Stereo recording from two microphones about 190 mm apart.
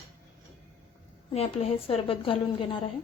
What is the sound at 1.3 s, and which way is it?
A woman's voice, 30° left (ahead or behind).